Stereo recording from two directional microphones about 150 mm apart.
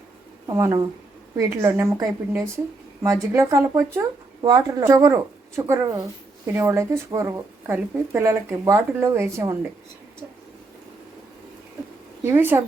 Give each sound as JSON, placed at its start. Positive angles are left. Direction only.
{"t": 0.4, "sound": "a woman's voice", "side_deg": -25}
{"t": 12.2, "sound": "a woman's voice", "side_deg": -15}